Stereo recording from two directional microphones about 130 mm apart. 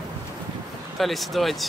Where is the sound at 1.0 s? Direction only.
Centre (ahead or behind).